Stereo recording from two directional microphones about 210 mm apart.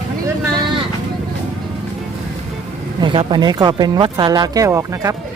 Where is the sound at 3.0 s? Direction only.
20° right (ahead or behind).